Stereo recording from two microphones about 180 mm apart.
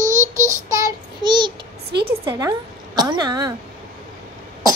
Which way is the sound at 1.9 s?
65° right (ahead or behind).